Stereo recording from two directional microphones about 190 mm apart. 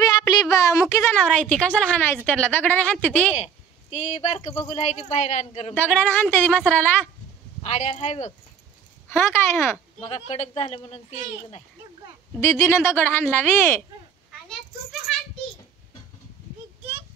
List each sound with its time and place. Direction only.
0.0 s a woman's voice: 20° left (ahead or behind)
3.9 s speech: 35° left (ahead or behind)
5.8 s speech: 10° left (ahead or behind)
7.6 s speech: 35° left (ahead or behind)
9.1 s speech: 15° left (ahead or behind)
9.9 s speech: 30° left (ahead or behind)
12.4 s speech: 15° left (ahead or behind)
15.1 s a sound: centre (ahead or behind)